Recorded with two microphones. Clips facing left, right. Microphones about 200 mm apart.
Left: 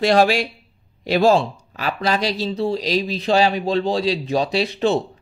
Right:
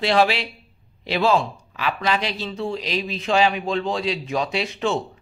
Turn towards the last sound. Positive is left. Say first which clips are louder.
# left 5 dB
turn(degrees=35)  # may be behind; listen again after turning